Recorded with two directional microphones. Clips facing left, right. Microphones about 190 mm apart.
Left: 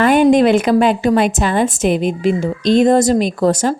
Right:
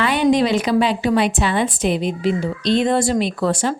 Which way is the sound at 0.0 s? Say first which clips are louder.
Left 6 dB; 50° left (ahead or behind).